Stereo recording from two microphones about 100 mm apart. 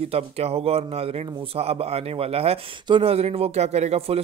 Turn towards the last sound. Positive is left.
turn(degrees=-85)